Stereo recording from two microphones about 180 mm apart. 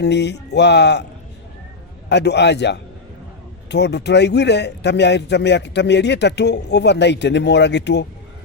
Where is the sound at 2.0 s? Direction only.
70° left (ahead or behind).